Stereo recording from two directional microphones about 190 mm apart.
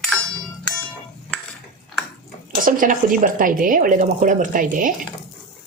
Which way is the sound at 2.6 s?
45° right (ahead or behind).